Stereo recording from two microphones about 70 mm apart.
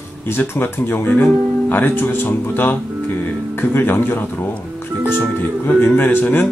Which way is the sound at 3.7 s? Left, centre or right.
Left.